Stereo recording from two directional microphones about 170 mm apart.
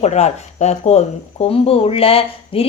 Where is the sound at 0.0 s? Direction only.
40° left (ahead or behind).